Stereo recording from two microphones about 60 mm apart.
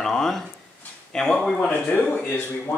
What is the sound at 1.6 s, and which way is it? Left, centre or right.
Speech, centre.